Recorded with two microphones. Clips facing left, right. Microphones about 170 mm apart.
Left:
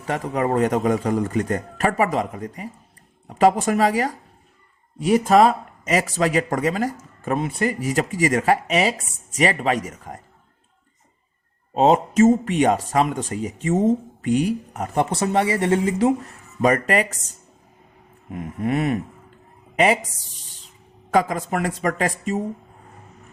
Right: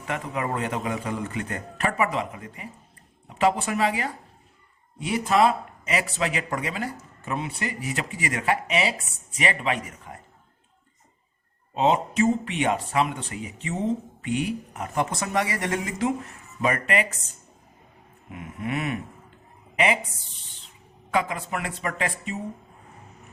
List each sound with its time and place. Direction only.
0.1 s speech: 40° left (ahead or behind)
11.7 s speech: 45° left (ahead or behind)
16.6 s speech: 40° left (ahead or behind)
18.3 s speech: 40° left (ahead or behind)
21.1 s speech: 40° left (ahead or behind)